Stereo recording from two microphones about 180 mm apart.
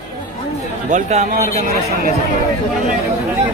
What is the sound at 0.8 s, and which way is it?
Speech, 40° right (ahead or behind).